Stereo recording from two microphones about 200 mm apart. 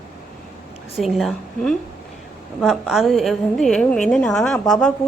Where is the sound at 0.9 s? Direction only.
Centre (ahead or behind).